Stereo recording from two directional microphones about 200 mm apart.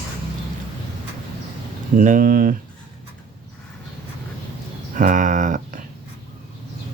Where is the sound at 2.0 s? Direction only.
40° right (ahead or behind).